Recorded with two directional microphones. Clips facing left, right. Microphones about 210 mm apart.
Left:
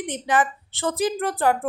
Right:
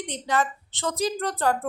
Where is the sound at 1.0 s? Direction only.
15° left (ahead or behind).